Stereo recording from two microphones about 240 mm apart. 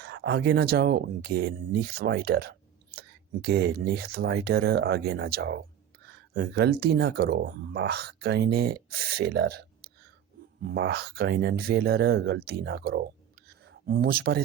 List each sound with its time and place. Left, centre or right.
0.0 s speech: right